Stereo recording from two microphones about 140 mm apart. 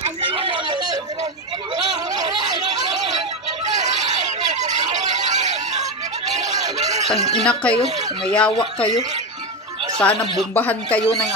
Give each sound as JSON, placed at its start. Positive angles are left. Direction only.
{"t": 0.2, "sound": "a sound", "side_deg": -35}
{"t": 7.4, "sound": "speech", "side_deg": 10}
{"t": 9.9, "sound": "speech", "side_deg": 10}